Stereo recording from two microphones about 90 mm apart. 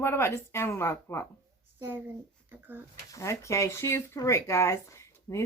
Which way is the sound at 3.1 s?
35° left (ahead or behind).